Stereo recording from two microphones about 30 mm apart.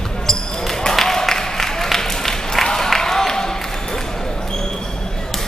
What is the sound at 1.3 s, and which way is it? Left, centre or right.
Applause, centre.